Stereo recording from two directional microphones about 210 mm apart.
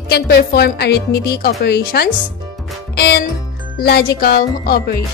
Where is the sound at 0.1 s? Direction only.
50° left (ahead or behind).